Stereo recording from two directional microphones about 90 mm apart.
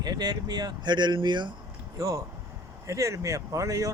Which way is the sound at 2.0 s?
40° right (ahead or behind).